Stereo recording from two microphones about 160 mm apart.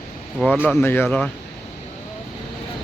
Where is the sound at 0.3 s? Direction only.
5° left (ahead or behind).